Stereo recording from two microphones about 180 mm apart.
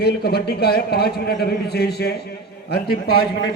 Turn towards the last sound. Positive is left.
turn(degrees=60)  # may be behind; listen again after turning